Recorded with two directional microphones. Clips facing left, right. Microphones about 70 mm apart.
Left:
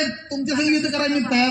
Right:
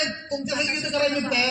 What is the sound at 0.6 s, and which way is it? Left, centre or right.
Speech, left.